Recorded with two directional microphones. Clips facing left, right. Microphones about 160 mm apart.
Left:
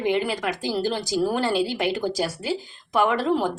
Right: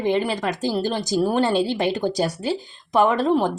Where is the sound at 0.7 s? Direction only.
15° right (ahead or behind).